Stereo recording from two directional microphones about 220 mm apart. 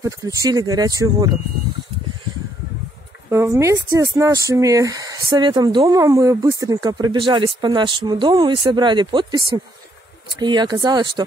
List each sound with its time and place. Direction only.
0.0 s speech: 15° right (ahead or behind)
3.3 s speech: 15° right (ahead or behind)
10.4 s speech: 20° right (ahead or behind)